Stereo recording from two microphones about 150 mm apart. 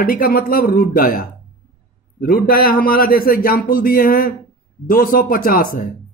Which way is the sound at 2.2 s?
85° left.